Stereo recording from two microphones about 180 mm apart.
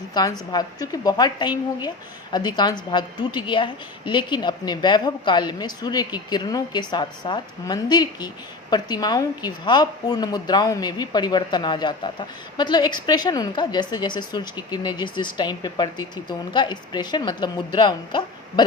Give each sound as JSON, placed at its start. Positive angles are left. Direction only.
{"t": 0.1, "sound": "a woman's voice", "side_deg": 20}